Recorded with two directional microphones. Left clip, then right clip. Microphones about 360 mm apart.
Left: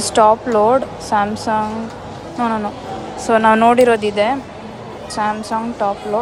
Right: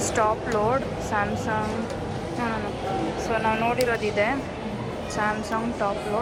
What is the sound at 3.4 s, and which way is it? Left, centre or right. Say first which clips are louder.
Speech: left 13 dB; left.